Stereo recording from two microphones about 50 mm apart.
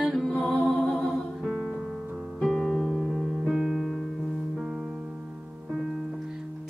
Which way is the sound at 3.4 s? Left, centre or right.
Centre.